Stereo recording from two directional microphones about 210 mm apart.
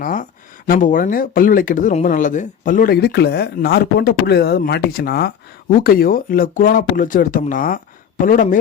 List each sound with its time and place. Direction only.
0.0 s speech: 40° left (ahead or behind)